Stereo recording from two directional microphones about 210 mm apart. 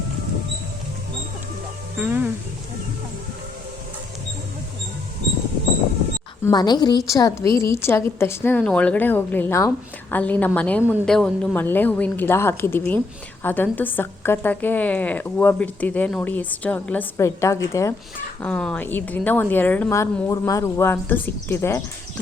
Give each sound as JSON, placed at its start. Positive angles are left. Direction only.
{"t": 2.0, "sound": "speech", "side_deg": -10}
{"t": 6.4, "sound": "a woman's voice", "side_deg": 20}